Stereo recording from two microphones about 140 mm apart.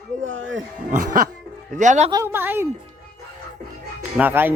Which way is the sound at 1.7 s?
60° right (ahead or behind).